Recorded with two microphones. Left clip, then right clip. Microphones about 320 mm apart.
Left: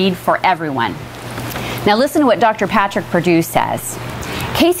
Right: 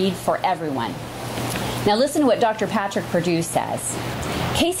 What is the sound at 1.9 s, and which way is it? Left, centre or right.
A woman's voice, left.